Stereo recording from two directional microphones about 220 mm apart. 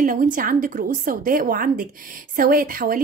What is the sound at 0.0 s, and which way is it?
A woman's voice, 35° right (ahead or behind).